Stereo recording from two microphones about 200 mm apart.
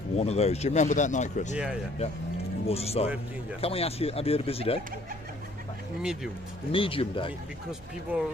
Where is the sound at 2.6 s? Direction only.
30° left (ahead or behind).